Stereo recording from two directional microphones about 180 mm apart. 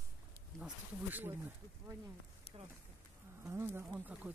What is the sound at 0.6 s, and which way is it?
Speech, 10° right (ahead or behind).